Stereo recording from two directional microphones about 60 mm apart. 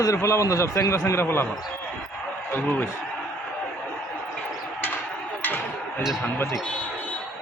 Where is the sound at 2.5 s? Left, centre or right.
Left.